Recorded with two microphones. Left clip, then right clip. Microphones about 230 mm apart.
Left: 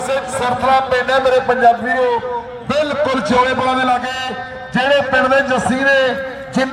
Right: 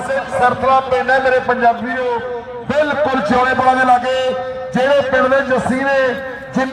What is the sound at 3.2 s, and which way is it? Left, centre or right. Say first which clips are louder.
A man's voice: right 2 dB; left.